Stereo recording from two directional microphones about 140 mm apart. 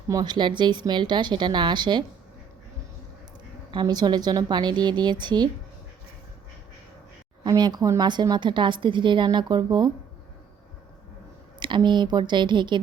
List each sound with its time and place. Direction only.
0.1 s a woman's voice: 30° right (ahead or behind)
3.7 s a woman's voice: 30° right (ahead or behind)
7.4 s a woman's voice: 30° right (ahead or behind)
11.6 s a woman's voice: 35° right (ahead or behind)